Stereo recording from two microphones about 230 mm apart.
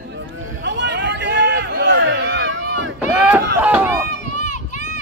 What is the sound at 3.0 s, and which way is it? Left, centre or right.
Run, centre.